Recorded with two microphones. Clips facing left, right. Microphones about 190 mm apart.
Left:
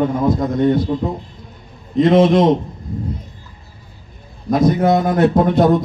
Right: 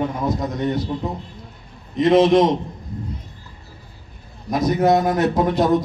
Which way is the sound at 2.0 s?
55° left (ahead or behind).